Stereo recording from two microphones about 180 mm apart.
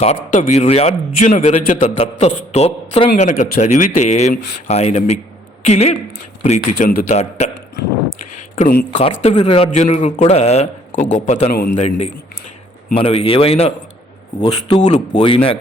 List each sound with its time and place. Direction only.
0.0 s speech: 40° left (ahead or behind)
11.5 s a man's voice: 50° left (ahead or behind)
11.8 s speech: 35° left (ahead or behind)
14.8 s speech: 40° left (ahead or behind)